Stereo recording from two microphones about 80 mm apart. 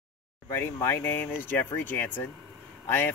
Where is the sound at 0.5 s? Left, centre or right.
Left.